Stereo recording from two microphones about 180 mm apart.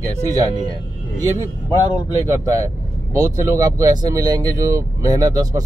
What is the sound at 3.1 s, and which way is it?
Speech, 15° right (ahead or behind).